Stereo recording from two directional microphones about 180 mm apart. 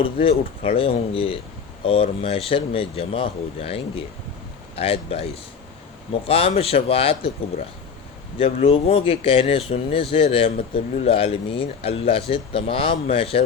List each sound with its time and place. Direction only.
0.0 s speech: 30° left (ahead or behind)
8.4 s speech: 35° left (ahead or behind)